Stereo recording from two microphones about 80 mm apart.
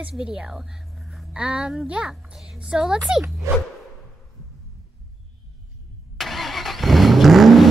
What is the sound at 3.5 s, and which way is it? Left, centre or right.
Whoosh, right.